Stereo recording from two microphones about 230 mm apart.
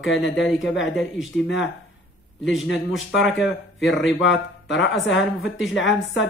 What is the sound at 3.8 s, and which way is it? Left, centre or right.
Speech, left.